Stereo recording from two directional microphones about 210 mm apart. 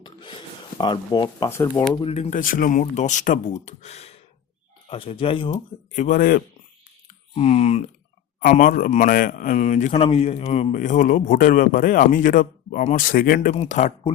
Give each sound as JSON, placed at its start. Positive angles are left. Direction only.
{"t": 0.0, "sound": "a sound", "side_deg": 25}
{"t": 2.0, "sound": "a man's voice", "side_deg": 30}
{"t": 5.9, "sound": "a man's voice", "side_deg": 35}
{"t": 7.3, "sound": "a man's voice", "side_deg": 30}